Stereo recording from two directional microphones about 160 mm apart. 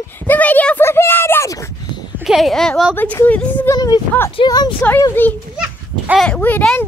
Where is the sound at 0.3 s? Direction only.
10° left (ahead or behind).